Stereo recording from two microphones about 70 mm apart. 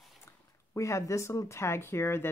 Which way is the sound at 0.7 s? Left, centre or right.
Left.